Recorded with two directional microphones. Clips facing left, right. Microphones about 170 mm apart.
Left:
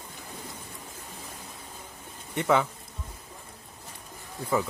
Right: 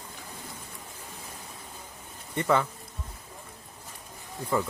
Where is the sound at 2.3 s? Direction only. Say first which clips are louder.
Left 1 dB; centre (ahead or behind).